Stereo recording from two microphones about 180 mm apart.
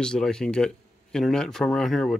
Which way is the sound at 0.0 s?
5° left (ahead or behind).